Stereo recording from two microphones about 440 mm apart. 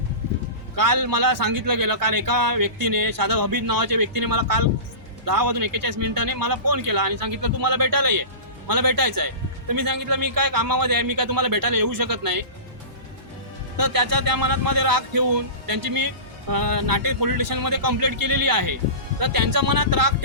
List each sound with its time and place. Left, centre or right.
0.8 s a man's voice: right
13.7 s a man's voice: right